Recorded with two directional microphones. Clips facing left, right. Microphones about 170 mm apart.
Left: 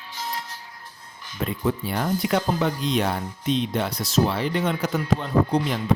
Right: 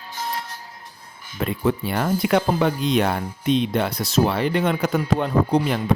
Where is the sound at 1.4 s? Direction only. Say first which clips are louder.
Right 3 dB; 70° right (ahead or behind).